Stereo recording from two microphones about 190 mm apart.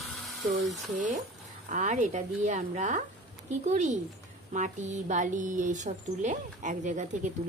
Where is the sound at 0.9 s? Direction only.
40° right (ahead or behind).